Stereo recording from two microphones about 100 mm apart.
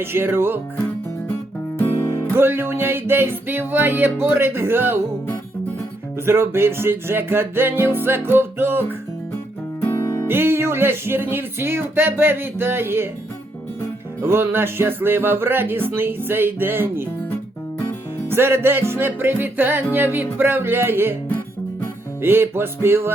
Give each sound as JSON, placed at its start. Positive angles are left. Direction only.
{"t": 0.0, "sound": "music", "side_deg": -25}
{"t": 1.8, "sound": "music", "side_deg": 25}
{"t": 2.3, "sound": "music", "side_deg": -25}
{"t": 6.2, "sound": "music", "side_deg": -25}
{"t": 9.8, "sound": "music", "side_deg": 30}
{"t": 10.2, "sound": "music", "side_deg": -20}
{"t": 14.2, "sound": "music", "side_deg": -25}
{"t": 18.3, "sound": "music", "side_deg": -25}
{"t": 22.2, "sound": "music", "side_deg": -20}